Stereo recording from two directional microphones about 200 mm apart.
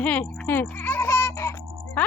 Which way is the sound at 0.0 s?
10° left (ahead or behind).